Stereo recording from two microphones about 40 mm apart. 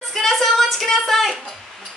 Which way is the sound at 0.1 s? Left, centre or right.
Centre.